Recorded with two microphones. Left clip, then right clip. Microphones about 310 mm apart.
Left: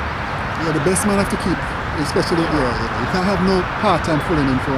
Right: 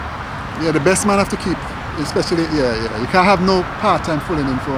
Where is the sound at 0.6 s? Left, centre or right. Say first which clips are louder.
Right 5 dB; centre.